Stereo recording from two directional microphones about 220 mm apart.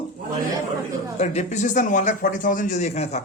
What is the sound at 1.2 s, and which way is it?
Speech, 30° left (ahead or behind).